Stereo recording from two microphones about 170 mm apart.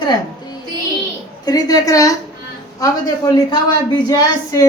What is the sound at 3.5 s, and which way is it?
A man's voice, 25° left (ahead or behind).